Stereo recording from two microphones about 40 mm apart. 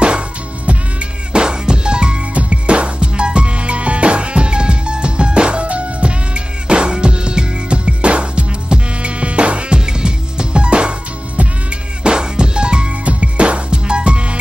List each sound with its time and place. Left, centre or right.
0.7 s music: right